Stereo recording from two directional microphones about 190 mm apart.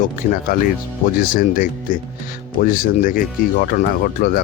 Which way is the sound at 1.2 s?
50° left (ahead or behind).